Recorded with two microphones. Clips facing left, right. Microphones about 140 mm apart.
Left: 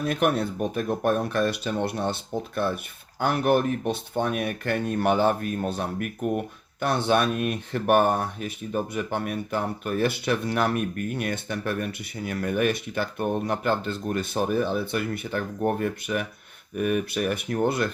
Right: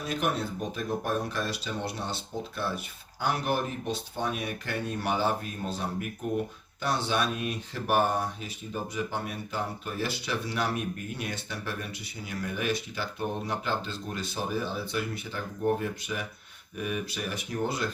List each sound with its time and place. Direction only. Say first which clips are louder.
0.0 s speech: left 6 dB; 60° left (ahead or behind)